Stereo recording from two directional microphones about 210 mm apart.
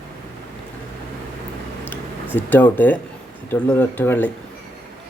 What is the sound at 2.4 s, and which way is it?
Speech, 10° left (ahead or behind).